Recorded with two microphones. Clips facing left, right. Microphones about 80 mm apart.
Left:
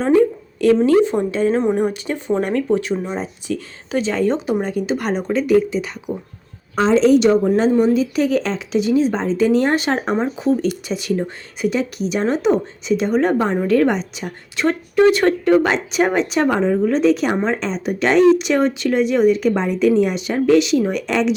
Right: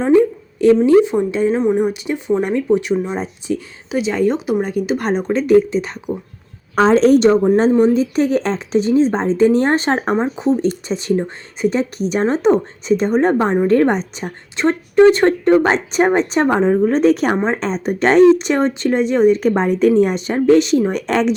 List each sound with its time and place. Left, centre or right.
1.3 s speech: centre
1.5 s speech: centre
1.9 s speech: centre
2.9 s speech: centre
3.2 s speech: right
6.7 s a woman's voice: right
7.8 s a woman's voice: right
17.3 s speech: right
17.6 s a woman's voice: right